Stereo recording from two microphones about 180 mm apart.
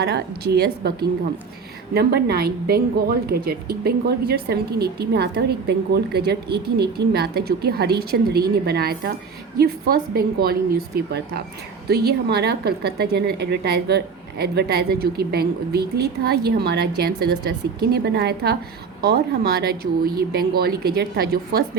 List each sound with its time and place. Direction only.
0.0 s a woman's voice: 65° right (ahead or behind)